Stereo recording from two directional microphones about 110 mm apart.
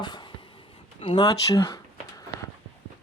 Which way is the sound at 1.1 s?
35° left (ahead or behind).